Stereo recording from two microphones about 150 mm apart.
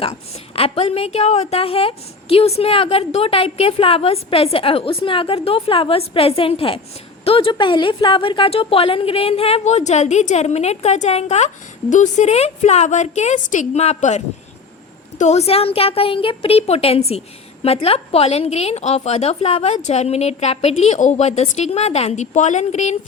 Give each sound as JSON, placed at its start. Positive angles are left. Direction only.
{"t": 0.0, "sound": "a woman's voice", "side_deg": 40}
{"t": 15.2, "sound": "a woman's voice", "side_deg": 50}